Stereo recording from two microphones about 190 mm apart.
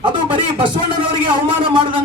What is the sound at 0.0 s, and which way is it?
Music, 25° right (ahead or behind).